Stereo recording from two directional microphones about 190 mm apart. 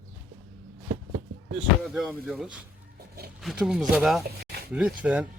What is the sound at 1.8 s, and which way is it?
Speech, centre (ahead or behind).